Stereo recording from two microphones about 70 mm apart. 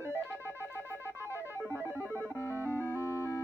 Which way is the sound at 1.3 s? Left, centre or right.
Right.